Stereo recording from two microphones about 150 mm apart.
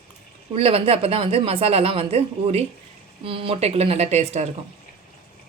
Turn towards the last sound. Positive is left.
turn(degrees=-45)  # may be behind; listen again after turning